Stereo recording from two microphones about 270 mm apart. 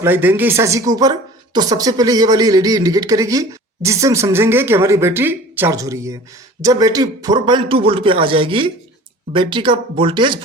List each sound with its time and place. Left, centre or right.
0.0 s speech: centre